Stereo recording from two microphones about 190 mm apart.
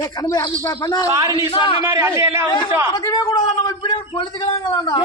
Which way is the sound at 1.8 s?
15° right (ahead or behind).